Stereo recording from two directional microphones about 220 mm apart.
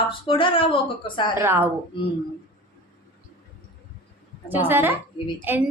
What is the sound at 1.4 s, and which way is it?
Speech, 10° right (ahead or behind).